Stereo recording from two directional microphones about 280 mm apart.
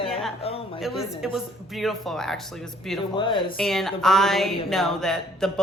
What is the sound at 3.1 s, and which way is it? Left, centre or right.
Speech, centre.